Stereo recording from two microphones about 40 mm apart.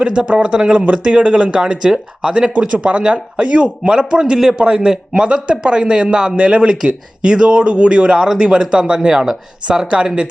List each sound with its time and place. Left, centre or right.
0.0 s a man's voice: right
1.8 s speech: centre
2.3 s a man's voice: right